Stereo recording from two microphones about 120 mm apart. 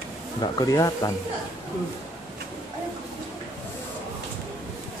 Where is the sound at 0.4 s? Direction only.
30° left (ahead or behind).